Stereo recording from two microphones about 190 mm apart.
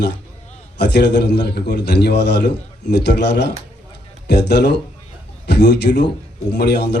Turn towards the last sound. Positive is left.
turn(degrees=60)  # may be behind; listen again after turning